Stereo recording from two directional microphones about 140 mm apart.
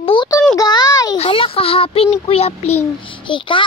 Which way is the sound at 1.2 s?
40° left (ahead or behind).